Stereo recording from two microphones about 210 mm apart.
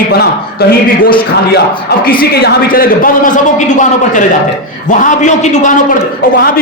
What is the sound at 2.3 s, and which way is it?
A man's voice, 50° left (ahead or behind).